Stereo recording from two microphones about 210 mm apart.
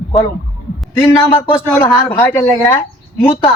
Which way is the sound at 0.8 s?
10° left (ahead or behind).